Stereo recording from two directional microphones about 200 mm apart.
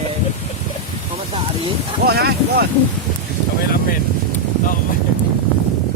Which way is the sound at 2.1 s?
50° right (ahead or behind).